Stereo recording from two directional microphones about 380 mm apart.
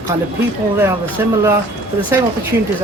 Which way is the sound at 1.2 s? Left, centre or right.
Centre.